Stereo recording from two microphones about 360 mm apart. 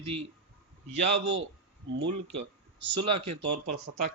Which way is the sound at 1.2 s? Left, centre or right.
Right.